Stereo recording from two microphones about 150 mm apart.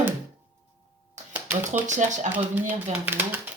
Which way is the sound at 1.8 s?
55° right (ahead or behind).